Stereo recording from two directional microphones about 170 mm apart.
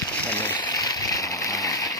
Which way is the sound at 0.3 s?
10° left (ahead or behind).